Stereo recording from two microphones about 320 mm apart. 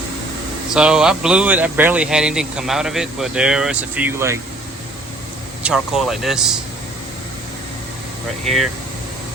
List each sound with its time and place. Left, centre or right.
0.7 s speech: centre
5.6 s speech: centre
8.4 s speech: centre